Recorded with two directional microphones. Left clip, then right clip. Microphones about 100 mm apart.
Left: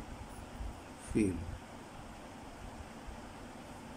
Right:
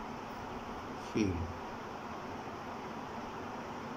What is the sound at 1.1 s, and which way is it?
Speech, 60° left (ahead or behind).